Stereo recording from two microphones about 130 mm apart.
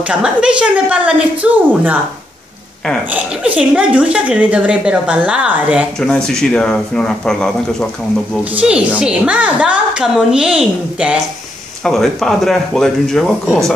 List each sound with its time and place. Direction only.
0.1 s a woman's voice: 10° right (ahead or behind)
3.5 s a woman's voice: 10° right (ahead or behind)
5.9 s speech: 5° left (ahead or behind)
8.5 s a woman's voice: 10° right (ahead or behind)